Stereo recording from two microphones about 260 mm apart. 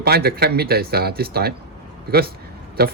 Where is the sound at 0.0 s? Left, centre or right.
Right.